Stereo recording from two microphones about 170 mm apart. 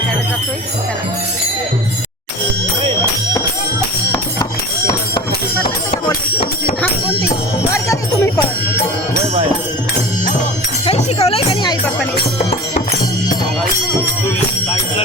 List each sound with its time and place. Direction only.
6.1 s music: 30° left (ahead or behind)
7.7 s music: 15° left (ahead or behind)
10.8 s music: 35° left (ahead or behind)